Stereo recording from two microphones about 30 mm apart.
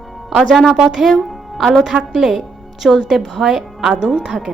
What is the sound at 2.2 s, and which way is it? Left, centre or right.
Music, centre.